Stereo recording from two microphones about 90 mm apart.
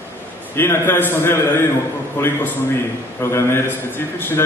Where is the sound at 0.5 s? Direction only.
30° left (ahead or behind).